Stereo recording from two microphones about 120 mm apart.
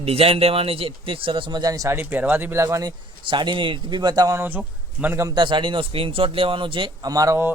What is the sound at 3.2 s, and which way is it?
A man's voice, 45° right (ahead or behind).